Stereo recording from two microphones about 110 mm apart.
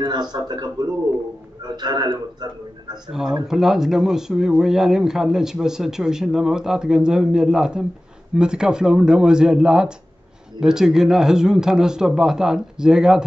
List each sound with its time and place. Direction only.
0.0 s a man's voice: 40° right (ahead or behind)
3.1 s speech: 5° right (ahead or behind)